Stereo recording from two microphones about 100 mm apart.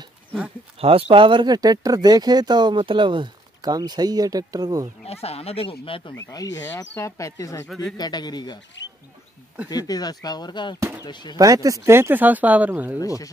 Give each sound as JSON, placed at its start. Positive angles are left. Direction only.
{"t": 0.7, "sound": "speech", "side_deg": -75}
{"t": 5.0, "sound": "speech", "side_deg": 90}
{"t": 6.2, "sound": "speech", "side_deg": 35}
{"t": 7.6, "sound": "speech", "side_deg": 5}
{"t": 8.0, "sound": "a man's voice", "side_deg": 45}
{"t": 9.7, "sound": "a man's voice", "side_deg": 40}
{"t": 11.3, "sound": "speech", "side_deg": -35}
{"t": 13.0, "sound": "speech", "side_deg": 35}